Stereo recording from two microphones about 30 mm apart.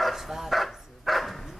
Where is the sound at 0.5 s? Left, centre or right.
Centre.